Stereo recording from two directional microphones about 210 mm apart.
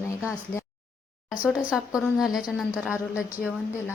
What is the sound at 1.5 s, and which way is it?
A woman's voice, centre (ahead or behind).